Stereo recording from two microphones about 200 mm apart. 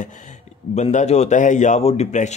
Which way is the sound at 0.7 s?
35° left (ahead or behind).